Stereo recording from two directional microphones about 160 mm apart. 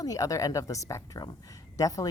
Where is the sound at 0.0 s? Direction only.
20° left (ahead or behind).